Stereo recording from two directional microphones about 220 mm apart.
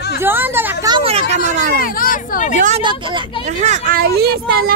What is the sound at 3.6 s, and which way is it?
A woman's voice, 35° right (ahead or behind).